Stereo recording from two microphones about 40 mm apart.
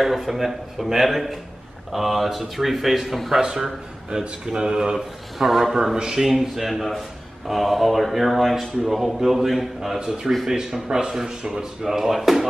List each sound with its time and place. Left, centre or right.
0.0 s speech: centre
5.9 s speech: centre
9.9 s speech: centre
11.8 s speech: centre